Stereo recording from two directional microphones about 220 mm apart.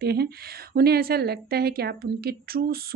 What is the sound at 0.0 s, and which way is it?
A woman's voice, 45° right (ahead or behind).